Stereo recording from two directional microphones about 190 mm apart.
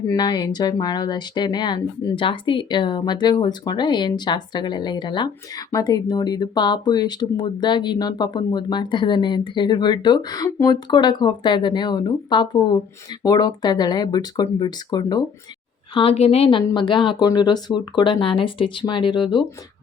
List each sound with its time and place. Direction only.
0.1 s speech: 20° left (ahead or behind)